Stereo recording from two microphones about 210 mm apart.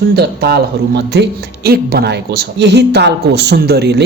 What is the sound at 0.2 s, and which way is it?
A man's voice, 50° right (ahead or behind).